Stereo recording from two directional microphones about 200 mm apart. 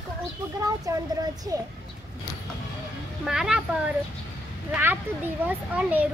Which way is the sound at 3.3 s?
Centre (ahead or behind).